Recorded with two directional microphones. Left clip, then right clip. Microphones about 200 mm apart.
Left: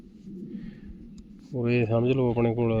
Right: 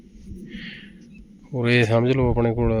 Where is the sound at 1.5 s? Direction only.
10° right (ahead or behind).